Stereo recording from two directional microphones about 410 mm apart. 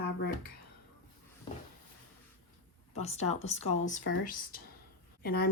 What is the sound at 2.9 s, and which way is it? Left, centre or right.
A woman's voice, centre.